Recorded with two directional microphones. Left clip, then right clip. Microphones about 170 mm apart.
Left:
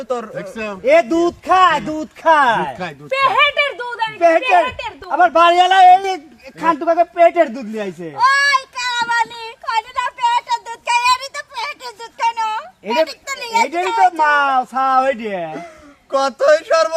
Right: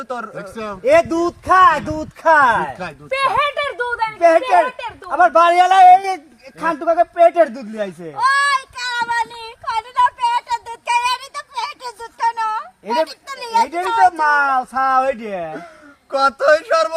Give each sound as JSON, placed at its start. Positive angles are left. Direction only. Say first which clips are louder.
{"t": 0.3, "sound": "speech", "louder": "left 2 dB", "side_deg": 0}
{"t": 0.9, "sound": "a man's voice", "louder": "left 1 dB", "side_deg": -35}
{"t": 2.7, "sound": "a sound", "louder": "left 2 dB", "side_deg": -5}
{"t": 4.2, "sound": "a man's voice", "louder": "even", "side_deg": -20}
{"t": 4.6, "sound": "a woman's voice", "louder": "left 1 dB", "side_deg": 0}
{"t": 5.1, "sound": "a man's voice", "louder": "left 1 dB", "side_deg": -20}
{"t": 8.1, "sound": "child singing", "louder": "left 2 dB", "side_deg": 20}
{"t": 12.2, "sound": "a sound", "louder": "left 1 dB", "side_deg": 35}
{"t": 14.0, "sound": "speech", "louder": "left 1 dB", "side_deg": 0}
{"t": 16.1, "sound": "music", "louder": "even", "side_deg": 15}